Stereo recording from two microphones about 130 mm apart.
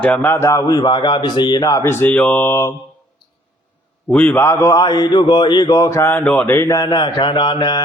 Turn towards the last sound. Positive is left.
turn(degrees=35)  # may be behind; listen again after turning